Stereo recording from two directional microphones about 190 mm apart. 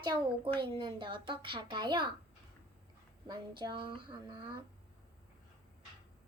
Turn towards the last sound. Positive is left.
turn(degrees=-25)  # may be behind; listen again after turning